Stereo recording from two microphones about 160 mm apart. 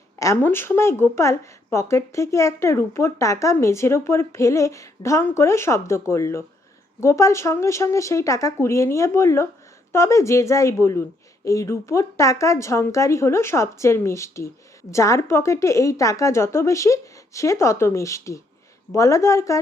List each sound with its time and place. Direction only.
0.2 s a woman's voice: 15° left (ahead or behind)